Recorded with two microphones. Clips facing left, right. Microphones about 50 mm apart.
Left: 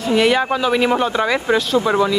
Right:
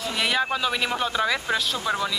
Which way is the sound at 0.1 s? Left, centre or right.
Centre.